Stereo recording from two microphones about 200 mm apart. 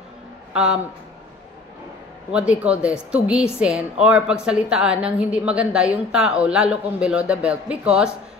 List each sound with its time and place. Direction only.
0.5 s speech: 5° right (ahead or behind)
2.3 s a woman's voice: 5° right (ahead or behind)